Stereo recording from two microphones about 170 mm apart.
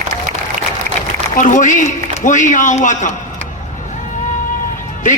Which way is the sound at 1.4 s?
50° left (ahead or behind).